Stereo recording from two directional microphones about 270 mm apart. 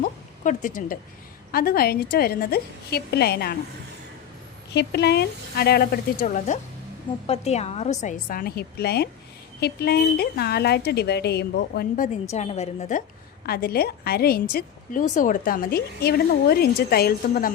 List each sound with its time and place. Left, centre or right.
0.0 s a sound: left
1.5 s a woman's voice: left
4.7 s a woman's voice: left
13.4 s a woman's voice: left